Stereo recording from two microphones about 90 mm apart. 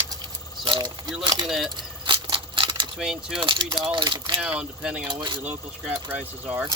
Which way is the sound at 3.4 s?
65° right (ahead or behind).